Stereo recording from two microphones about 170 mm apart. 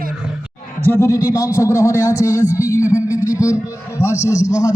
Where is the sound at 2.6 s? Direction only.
15° left (ahead or behind).